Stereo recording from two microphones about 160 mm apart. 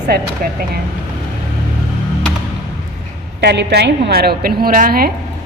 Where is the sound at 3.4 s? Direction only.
90° right; by 5.1 s 65° right (ahead or behind).